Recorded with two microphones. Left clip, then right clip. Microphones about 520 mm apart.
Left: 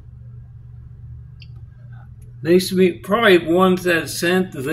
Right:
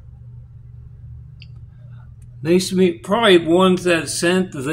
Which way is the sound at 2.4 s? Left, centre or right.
Left.